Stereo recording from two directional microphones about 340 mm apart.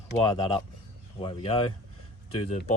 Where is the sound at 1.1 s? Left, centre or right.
Centre.